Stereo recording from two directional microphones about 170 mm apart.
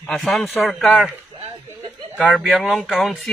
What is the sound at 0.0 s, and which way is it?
Speech, centre (ahead or behind).